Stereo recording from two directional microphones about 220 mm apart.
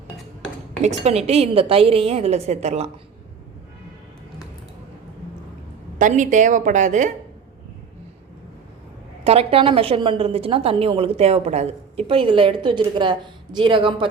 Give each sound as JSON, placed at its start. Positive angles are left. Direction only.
{"t": 0.8, "sound": "a woman's voice", "side_deg": -30}
{"t": 6.0, "sound": "a woman's voice", "side_deg": -35}
{"t": 9.2, "sound": "a woman's voice", "side_deg": -25}